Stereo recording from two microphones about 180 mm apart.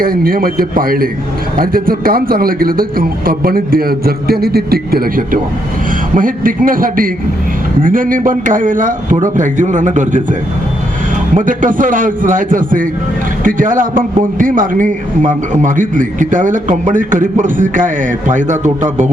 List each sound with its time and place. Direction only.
0.0 s a man's voice: 55° right (ahead or behind)
11.3 s a man's voice: 45° right (ahead or behind)